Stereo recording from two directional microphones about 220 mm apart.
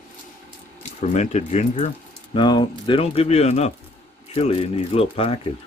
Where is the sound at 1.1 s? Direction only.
30° left (ahead or behind).